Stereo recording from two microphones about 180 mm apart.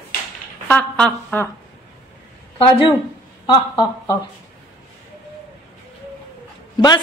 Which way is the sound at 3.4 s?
25° left (ahead or behind).